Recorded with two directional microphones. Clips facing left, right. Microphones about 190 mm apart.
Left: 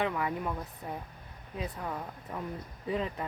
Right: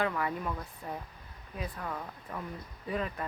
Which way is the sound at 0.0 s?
15° left (ahead or behind).